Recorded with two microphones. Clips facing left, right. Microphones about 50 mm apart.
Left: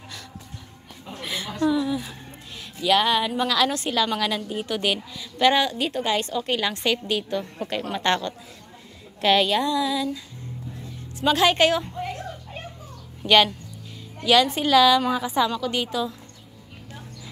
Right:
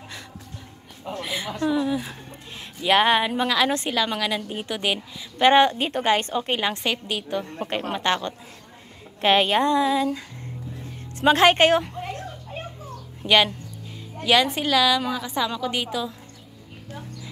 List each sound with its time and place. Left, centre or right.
1.2 s a sound: centre; by 3.3 s right
3.3 s a woman's voice: centre
3.9 s a woman's voice: centre
5.4 s a woman's voice: right
6.4 s a woman's voice: right
6.8 s a woman's voice: centre
9.2 s speech: right
11.2 s speech: right
13.2 s a woman's voice: centre
15.0 s a woman's voice: centre
15.6 s a woman's voice: centre